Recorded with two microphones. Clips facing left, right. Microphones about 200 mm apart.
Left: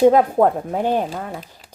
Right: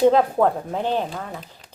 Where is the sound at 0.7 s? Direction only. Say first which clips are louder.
Left 3 dB; 10° left (ahead or behind).